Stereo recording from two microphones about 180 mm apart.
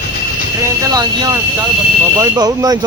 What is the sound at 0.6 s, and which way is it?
Vehicle, 20° right (ahead or behind).